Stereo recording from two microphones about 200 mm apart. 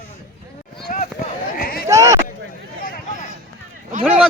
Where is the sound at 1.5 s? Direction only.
45° left (ahead or behind).